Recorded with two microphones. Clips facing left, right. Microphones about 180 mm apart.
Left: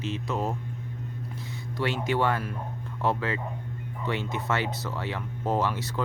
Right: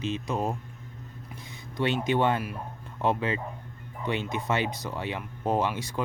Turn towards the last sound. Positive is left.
turn(degrees=-15)  # may be behind; listen again after turning